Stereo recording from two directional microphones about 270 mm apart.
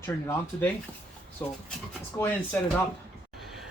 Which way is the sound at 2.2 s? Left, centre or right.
Centre.